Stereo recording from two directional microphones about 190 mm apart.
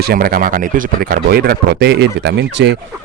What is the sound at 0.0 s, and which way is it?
Speech, 50° right (ahead or behind).